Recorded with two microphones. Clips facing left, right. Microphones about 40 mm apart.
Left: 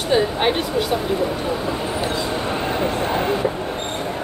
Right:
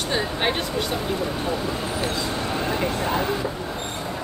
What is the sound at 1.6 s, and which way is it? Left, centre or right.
Speech, left.